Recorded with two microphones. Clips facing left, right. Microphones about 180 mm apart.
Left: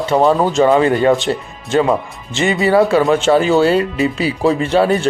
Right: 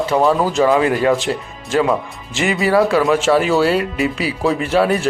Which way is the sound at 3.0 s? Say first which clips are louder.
Left 2 dB; centre (ahead or behind).